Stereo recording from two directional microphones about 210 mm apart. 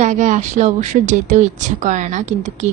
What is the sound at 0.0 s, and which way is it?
Speech, 35° right (ahead or behind).